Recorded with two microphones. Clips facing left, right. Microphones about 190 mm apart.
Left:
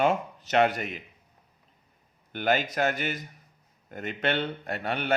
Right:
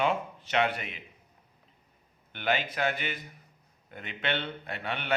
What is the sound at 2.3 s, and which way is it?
A man's voice, 45° left (ahead or behind).